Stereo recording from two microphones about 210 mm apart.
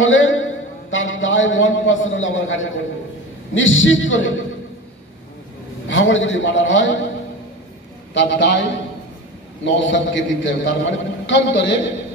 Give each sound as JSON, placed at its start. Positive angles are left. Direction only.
{"t": 0.0, "sound": "a sound", "side_deg": 65}
{"t": 3.5, "sound": "a man's voice", "side_deg": 65}
{"t": 5.9, "sound": "a man's voice", "side_deg": 65}
{"t": 8.1, "sound": "a man's voice", "side_deg": 60}